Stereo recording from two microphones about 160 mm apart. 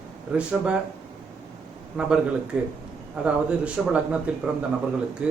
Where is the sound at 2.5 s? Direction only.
5° right (ahead or behind).